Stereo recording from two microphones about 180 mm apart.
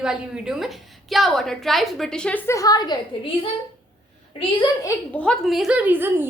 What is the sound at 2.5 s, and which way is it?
Speech, 20° left (ahead or behind).